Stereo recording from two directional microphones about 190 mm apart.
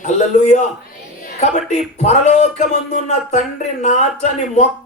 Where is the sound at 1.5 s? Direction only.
35° left (ahead or behind).